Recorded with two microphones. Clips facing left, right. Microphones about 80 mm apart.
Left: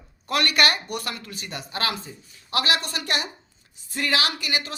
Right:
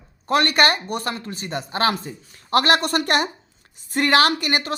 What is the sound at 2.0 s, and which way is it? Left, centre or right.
A woman's voice, right.